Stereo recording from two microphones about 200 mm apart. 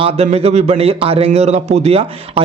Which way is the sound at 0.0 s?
30° right (ahead or behind).